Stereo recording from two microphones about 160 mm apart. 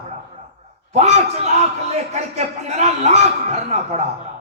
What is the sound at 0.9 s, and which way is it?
A man's voice, 45° right (ahead or behind).